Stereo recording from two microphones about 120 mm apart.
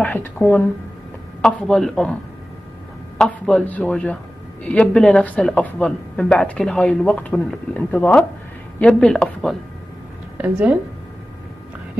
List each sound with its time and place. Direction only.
0.0 s a woman's voice: 15° left (ahead or behind)
1.4 s a woman's voice: 5° left (ahead or behind)
3.2 s a woman's voice: 5° left (ahead or behind)
10.3 s a woman's voice: 10° right (ahead or behind)